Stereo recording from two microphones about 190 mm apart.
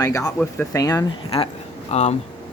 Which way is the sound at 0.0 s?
15° left (ahead or behind).